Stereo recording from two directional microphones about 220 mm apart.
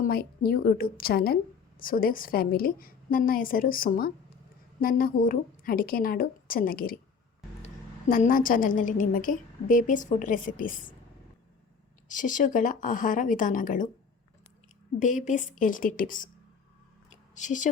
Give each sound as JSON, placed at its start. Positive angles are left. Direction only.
{"t": 0.0, "sound": "a woman's voice", "side_deg": 40}
{"t": 12.0, "sound": "a woman's voice", "side_deg": 35}
{"t": 14.9, "sound": "a woman's voice", "side_deg": 35}
{"t": 17.3, "sound": "a woman's voice", "side_deg": 35}